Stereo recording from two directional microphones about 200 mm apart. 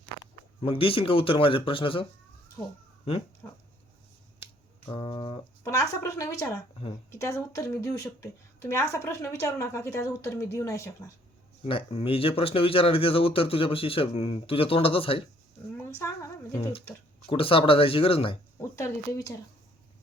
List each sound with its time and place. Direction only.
0.6 s speech: 25° left (ahead or behind)
2.6 s speech: 15° left (ahead or behind)
3.0 s cat: 30° left (ahead or behind)
4.9 s speech: 25° left (ahead or behind)
5.6 s speech: 15° left (ahead or behind)
11.6 s speech: 30° left (ahead or behind)
17.2 s speech: 25° left (ahead or behind)
18.8 s speech: 15° left (ahead or behind)